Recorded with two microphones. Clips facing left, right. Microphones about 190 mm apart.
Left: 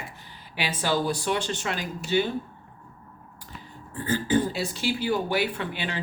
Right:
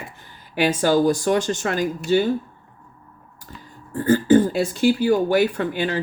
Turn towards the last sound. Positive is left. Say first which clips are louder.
# right 8 dB
turn(degrees=-45)  # may be behind; listen again after turning